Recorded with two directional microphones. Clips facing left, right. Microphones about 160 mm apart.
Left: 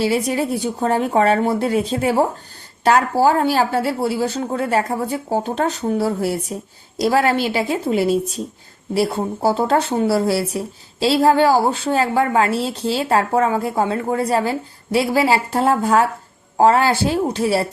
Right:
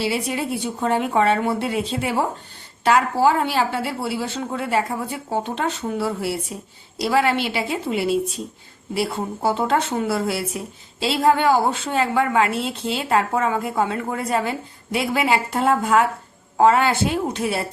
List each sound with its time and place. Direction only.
0.0 s a woman's voice: 40° left (ahead or behind)